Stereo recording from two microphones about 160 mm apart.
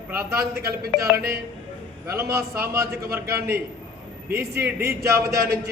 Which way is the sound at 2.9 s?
75° right (ahead or behind).